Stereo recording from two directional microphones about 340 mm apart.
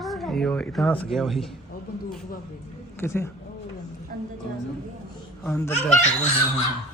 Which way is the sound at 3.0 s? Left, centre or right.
Centre.